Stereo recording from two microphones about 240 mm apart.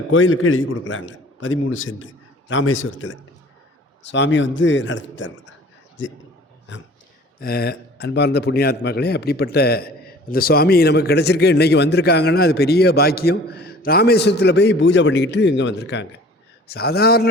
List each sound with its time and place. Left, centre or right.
0.1 s a man's voice: left
7.3 s a man's voice: left